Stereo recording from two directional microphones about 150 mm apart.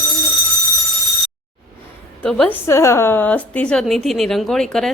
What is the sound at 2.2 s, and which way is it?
A woman's voice, 5° left (ahead or behind).